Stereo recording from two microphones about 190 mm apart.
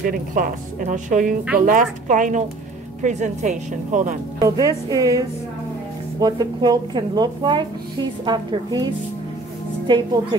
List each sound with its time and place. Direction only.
0.3 s a woman's voice: 45° right (ahead or behind)
4.4 s speech: 20° right (ahead or behind)